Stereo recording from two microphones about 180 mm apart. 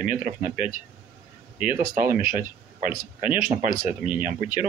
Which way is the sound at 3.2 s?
50° right (ahead or behind).